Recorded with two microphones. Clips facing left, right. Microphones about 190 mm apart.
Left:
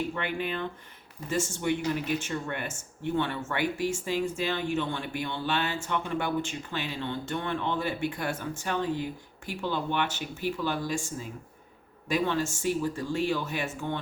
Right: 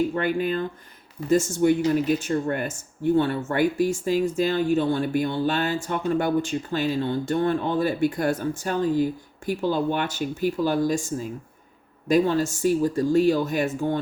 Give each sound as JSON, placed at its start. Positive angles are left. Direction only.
{"t": 0.1, "sound": "speech", "side_deg": -40}